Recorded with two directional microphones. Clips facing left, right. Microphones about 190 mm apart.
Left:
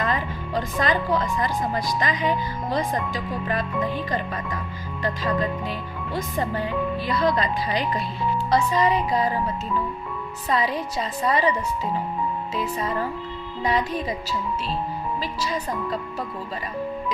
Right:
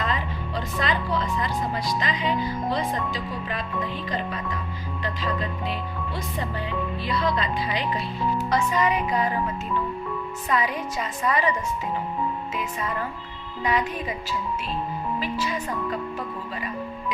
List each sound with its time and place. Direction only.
0.0 s a woman's voice: 45° left (ahead or behind)
7.1 s a woman's voice: 45° left (ahead or behind)
10.5 s a woman's voice: 35° left (ahead or behind)
12.5 s a woman's voice: 35° left (ahead or behind)
15.2 s a woman's voice: 40° left (ahead or behind)